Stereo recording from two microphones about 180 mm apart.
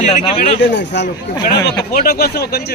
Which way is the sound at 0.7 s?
70° left (ahead or behind).